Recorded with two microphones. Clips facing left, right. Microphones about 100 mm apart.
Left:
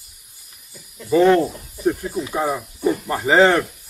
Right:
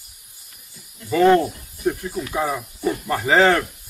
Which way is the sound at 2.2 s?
15° left (ahead or behind).